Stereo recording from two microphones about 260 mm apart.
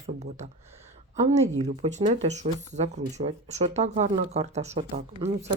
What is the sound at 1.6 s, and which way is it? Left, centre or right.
Speech, right.